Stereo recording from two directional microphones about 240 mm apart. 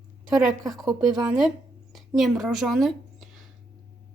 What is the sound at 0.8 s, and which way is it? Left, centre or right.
Speech, centre.